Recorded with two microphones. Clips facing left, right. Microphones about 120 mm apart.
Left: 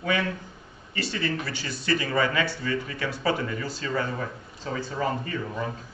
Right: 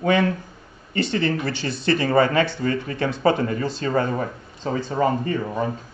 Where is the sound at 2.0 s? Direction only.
50° right (ahead or behind).